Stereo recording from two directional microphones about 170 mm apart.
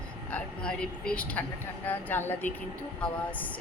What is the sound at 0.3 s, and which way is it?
A woman's voice, 5° left (ahead or behind).